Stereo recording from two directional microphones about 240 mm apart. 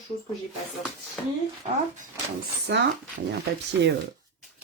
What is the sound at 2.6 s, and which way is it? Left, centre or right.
Speech, right.